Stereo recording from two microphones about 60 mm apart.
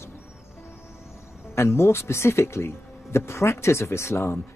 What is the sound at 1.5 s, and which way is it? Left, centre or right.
Speech, left.